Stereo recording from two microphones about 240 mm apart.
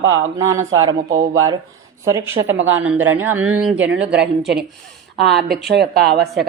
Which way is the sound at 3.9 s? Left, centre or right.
Right.